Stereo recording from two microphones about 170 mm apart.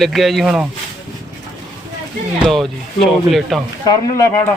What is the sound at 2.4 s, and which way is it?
Speech, centre (ahead or behind).